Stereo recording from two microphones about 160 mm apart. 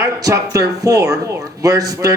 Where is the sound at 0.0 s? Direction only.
20° right (ahead or behind).